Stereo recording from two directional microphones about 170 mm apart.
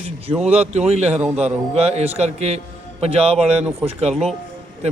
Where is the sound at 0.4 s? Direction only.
40° right (ahead or behind).